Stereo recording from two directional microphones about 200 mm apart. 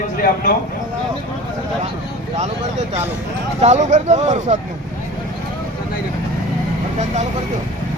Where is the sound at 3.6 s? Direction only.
35° right (ahead or behind).